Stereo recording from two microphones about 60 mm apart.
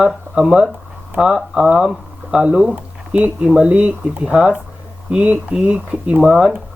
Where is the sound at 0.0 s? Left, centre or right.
Centre.